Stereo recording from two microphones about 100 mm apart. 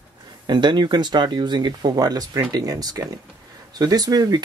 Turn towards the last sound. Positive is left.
turn(degrees=-40)  # may be behind; listen again after turning